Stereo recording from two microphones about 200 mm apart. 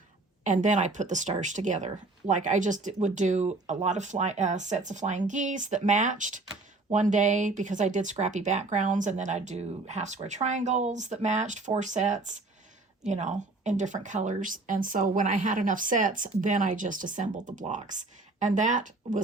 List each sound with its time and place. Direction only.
0.4 s speech: 40° right (ahead or behind)